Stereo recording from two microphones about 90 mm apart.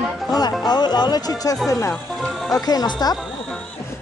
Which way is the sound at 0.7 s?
50° left (ahead or behind).